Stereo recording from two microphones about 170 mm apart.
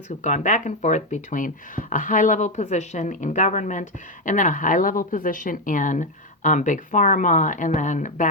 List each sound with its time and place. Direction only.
0.2 s a woman's voice: 45° left (ahead or behind)